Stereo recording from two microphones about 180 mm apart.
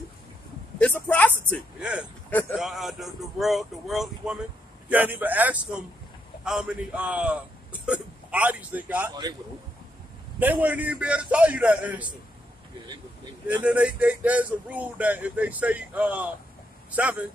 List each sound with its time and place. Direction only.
0.7 s a sound: 5° left (ahead or behind)
1.8 s speech: 5° right (ahead or behind)
10.4 s speech: 10° right (ahead or behind)
12.8 s speech: 25° right (ahead or behind)
13.7 s speech: 5° right (ahead or behind)